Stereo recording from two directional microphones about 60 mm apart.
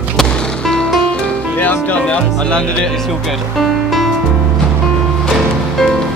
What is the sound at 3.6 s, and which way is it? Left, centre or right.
Music, centre.